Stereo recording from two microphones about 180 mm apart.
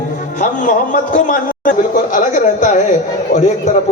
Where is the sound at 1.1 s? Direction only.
50° left (ahead or behind).